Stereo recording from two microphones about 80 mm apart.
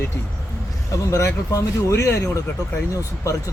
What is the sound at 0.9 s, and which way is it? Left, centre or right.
Speech, left.